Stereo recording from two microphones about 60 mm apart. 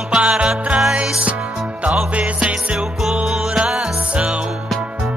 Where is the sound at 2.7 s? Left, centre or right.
Centre.